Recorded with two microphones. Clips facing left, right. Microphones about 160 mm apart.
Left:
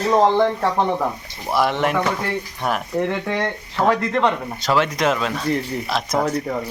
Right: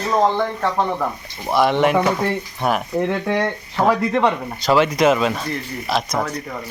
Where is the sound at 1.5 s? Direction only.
Centre (ahead or behind); by 4.2 s 15° right (ahead or behind).